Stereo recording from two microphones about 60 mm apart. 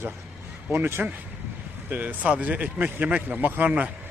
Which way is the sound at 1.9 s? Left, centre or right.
Right.